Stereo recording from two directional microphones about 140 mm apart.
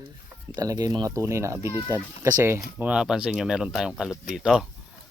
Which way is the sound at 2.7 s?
10° right (ahead or behind).